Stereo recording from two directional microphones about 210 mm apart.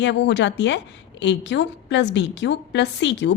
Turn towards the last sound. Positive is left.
turn(degrees=55)  # may be behind; listen again after turning